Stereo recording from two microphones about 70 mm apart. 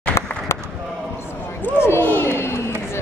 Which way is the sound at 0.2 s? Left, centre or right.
Left.